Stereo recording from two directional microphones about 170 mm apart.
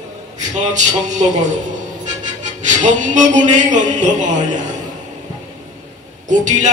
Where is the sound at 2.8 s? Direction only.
45° right (ahead or behind).